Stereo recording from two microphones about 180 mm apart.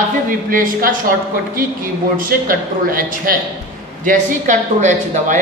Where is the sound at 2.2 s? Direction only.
50° right (ahead or behind).